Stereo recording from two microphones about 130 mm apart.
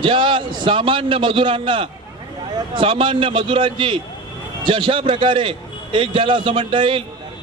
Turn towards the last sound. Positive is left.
turn(degrees=-40)  # may be behind; listen again after turning